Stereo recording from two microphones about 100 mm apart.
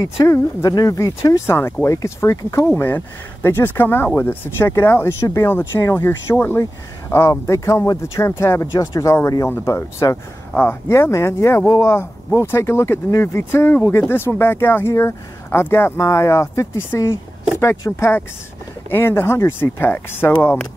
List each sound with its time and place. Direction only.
0.0 s speech: 30° left (ahead or behind)
1.4 s speech: 25° left (ahead or behind)